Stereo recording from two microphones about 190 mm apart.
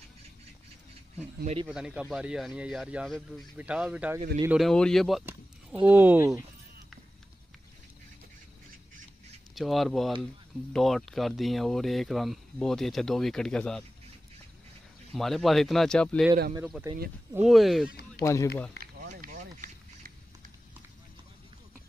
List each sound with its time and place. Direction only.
1.7 s speech: 5° right (ahead or behind)
9.6 s speech: centre (ahead or behind)
15.1 s speech: centre (ahead or behind)
17.5 s speech: centre (ahead or behind)
18.2 s speech: 15° left (ahead or behind)
19.0 s a sound: 40° right (ahead or behind)